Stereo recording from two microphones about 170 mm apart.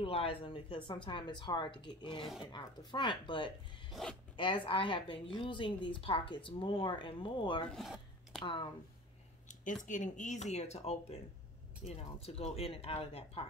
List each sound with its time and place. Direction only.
0.0 s a woman's voice: 30° left (ahead or behind)
3.9 s speech: 5° left (ahead or behind)
4.4 s a woman's voice: 30° left (ahead or behind)
7.6 s zipper: centre (ahead or behind)
8.4 s speech: 30° left (ahead or behind)
9.8 s speech: 45° left (ahead or behind)